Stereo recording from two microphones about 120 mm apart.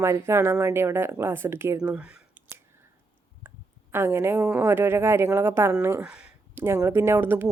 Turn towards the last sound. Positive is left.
turn(degrees=-20)  # may be behind; listen again after turning